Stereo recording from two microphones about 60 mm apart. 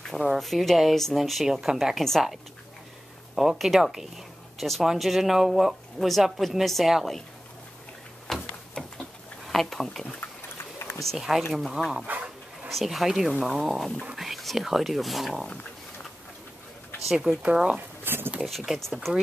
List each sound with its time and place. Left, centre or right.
0.1 s speech: centre
2.0 s speech: centre
3.3 s speech: centre
8.3 s a sound: centre
9.5 s speech: centre
12.1 s speech: right
12.7 s speech: centre
17.1 s speech: centre
17.4 s speech: centre
18.0 s speech: right
18.7 s speech: centre